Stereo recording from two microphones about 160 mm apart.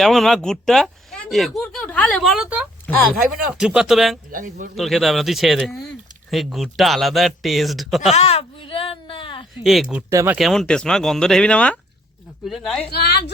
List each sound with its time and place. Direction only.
0.0 s speech: centre (ahead or behind)
2.9 s speech: 10° left (ahead or behind)
3.5 s speech: 5° right (ahead or behind)
4.3 s a man's voice: 60° right (ahead or behind)
4.7 s speech: centre (ahead or behind)
8.1 s a sound: 40° left (ahead or behind)
10.1 s speech: 15° right (ahead or behind)
10.3 s speech: centre (ahead or behind)
12.9 s a woman's voice: 90° left